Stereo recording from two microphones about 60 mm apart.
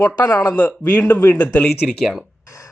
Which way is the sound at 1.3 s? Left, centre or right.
Left.